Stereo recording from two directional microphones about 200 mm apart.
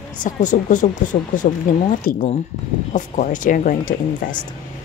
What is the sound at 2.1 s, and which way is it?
Speech, 45° left (ahead or behind).